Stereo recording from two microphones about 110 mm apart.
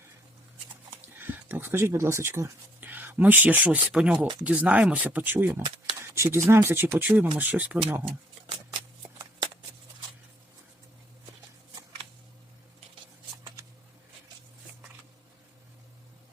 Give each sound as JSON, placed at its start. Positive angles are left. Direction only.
{"t": 1.2, "sound": "speech", "side_deg": -20}